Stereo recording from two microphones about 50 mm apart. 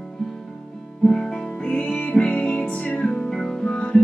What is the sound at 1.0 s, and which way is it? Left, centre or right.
Music, centre.